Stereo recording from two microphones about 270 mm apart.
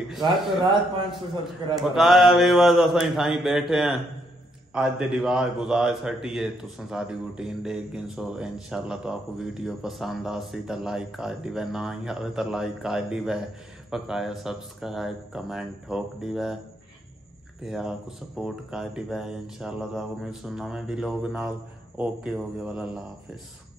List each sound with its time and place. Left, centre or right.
0.2 s a man's voice: centre
1.8 s a man's voice: centre
17.6 s a man's voice: centre